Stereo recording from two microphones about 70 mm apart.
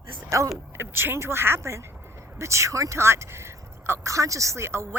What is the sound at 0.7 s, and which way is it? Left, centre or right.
A woman's voice, right.